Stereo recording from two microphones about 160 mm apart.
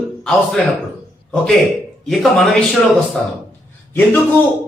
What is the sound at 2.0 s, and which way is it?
Speech, centre (ahead or behind).